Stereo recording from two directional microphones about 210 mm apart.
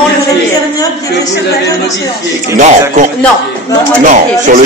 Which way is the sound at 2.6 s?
35° right (ahead or behind).